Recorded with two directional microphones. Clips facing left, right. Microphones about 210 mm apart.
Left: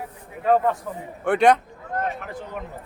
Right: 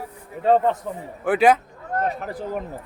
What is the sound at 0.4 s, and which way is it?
Speech, 25° right (ahead or behind).